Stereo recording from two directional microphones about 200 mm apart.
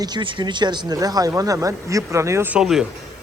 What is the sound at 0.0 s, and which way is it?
A man's voice, 20° right (ahead or behind).